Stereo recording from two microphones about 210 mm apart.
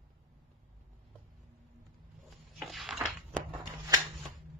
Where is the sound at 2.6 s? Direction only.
Centre (ahead or behind).